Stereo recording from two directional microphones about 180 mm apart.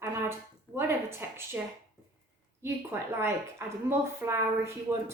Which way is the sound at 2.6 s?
15° right (ahead or behind).